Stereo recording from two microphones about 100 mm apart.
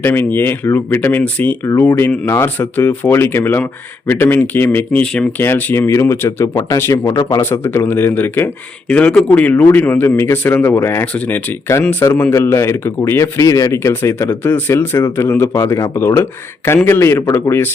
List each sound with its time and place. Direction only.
0.0 s speech: 20° left (ahead or behind)
1.6 s speech: 30° left (ahead or behind)
7.4 s speech: 25° left (ahead or behind)
8.9 s speech: 10° left (ahead or behind)